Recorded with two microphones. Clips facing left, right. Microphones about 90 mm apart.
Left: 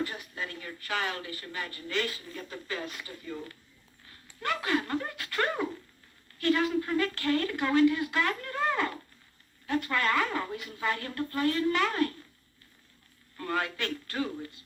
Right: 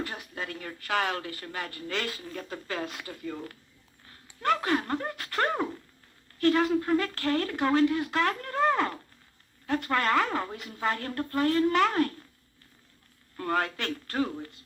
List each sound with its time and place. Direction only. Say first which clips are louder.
0.0 s speech: left 1 dB; 50° right (ahead or behind)
4.4 s speech: right 3 dB; 40° right (ahead or behind)
13.3 s speech: right 3 dB; 45° right (ahead or behind)